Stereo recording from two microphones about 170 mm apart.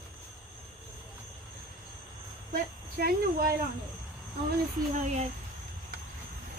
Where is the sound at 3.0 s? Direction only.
65° right (ahead or behind).